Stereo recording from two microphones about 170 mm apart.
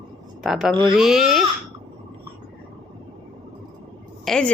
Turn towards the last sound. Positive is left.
turn(degrees=0)  # may be behind; listen again after turning